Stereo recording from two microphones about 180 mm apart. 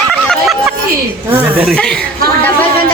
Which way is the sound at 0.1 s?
Centre (ahead or behind).